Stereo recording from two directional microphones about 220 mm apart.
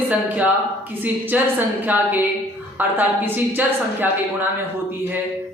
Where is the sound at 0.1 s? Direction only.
5° right (ahead or behind).